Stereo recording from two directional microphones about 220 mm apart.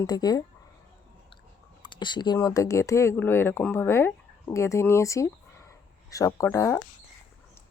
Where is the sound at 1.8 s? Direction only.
20° left (ahead or behind).